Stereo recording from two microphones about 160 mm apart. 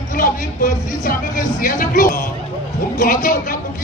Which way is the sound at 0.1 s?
60° left (ahead or behind).